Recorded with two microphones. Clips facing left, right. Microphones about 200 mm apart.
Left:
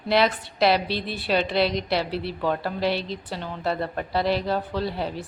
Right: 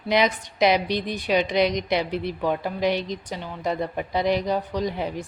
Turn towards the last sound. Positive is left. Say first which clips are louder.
# right 1 dB
turn(degrees=-15)  # may be behind; listen again after turning